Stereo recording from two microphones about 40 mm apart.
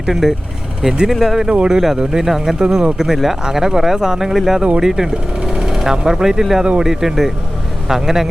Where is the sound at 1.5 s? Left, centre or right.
Right.